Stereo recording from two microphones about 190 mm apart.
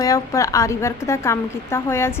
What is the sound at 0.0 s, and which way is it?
A woman's voice, 15° left (ahead or behind).